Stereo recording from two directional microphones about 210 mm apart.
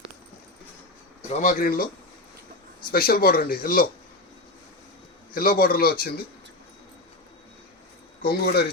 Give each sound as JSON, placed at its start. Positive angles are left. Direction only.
{"t": 1.3, "sound": "speech", "side_deg": 40}
{"t": 2.9, "sound": "speech", "side_deg": 45}
{"t": 5.3, "sound": "speech", "side_deg": 45}
{"t": 8.2, "sound": "speech", "side_deg": 45}